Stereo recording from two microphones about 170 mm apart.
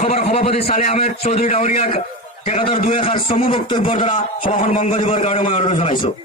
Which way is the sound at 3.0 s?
35° left (ahead or behind).